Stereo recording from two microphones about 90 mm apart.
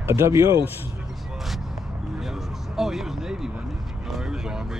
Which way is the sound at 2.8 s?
5° right (ahead or behind).